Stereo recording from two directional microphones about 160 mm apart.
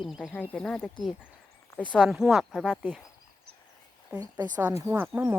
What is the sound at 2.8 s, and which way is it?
Speech, 10° right (ahead or behind).